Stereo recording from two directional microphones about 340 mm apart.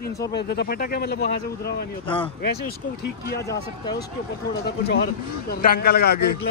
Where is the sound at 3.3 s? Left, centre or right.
Centre.